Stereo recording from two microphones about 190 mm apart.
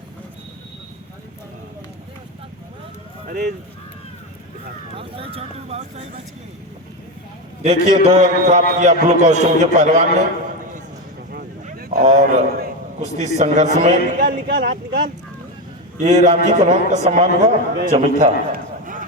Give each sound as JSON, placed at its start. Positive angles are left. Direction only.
{"t": 3.2, "sound": "speech", "side_deg": -55}
{"t": 4.9, "sound": "a man's voice", "side_deg": -30}
{"t": 7.6, "sound": "a man's voice", "side_deg": -35}
{"t": 11.3, "sound": "a man's voice", "side_deg": -50}
{"t": 16.0, "sound": "a man's voice", "side_deg": -40}
{"t": 18.2, "sound": "a sound", "side_deg": -45}